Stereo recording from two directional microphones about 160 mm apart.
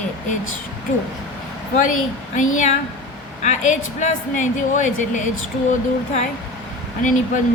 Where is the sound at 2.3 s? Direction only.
50° left (ahead or behind).